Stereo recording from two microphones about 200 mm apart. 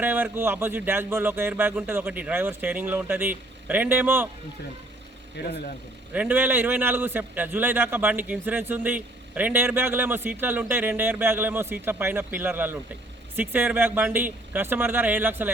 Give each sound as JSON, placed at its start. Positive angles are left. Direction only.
{"t": 0.0, "sound": "a man's voice", "side_deg": -10}
{"t": 5.4, "sound": "speech", "side_deg": 55}
{"t": 6.1, "sound": "a man's voice", "side_deg": -10}